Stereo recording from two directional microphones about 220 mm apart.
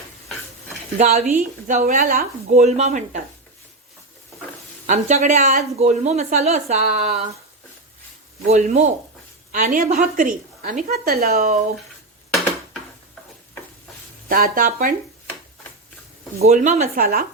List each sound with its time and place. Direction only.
0.9 s speech: 30° right (ahead or behind)
4.9 s speech: 35° right (ahead or behind)
8.4 s speech: 35° right (ahead or behind)
14.3 s speech: 40° right (ahead or behind)
16.4 s speech: 35° right (ahead or behind)